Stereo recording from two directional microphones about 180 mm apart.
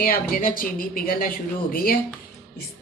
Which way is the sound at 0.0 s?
55° left (ahead or behind).